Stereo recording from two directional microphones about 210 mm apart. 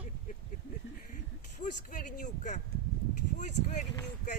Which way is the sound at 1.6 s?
35° left (ahead or behind).